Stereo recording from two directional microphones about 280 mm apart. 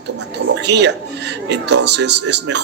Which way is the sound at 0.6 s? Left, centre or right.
Right.